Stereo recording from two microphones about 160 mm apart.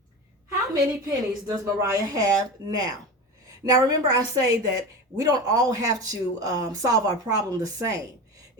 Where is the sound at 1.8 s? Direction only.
20° right (ahead or behind).